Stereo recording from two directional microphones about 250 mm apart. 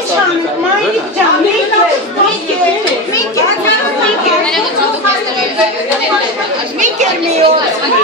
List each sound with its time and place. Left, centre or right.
6.8 s chatter: right